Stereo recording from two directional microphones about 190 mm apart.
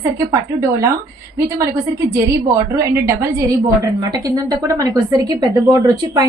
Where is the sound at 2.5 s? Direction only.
15° right (ahead or behind).